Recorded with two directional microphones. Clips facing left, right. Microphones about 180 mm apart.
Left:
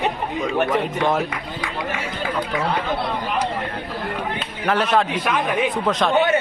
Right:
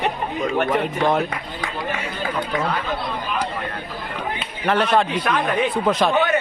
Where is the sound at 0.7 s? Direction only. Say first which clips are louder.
Right 1 dB; centre (ahead or behind).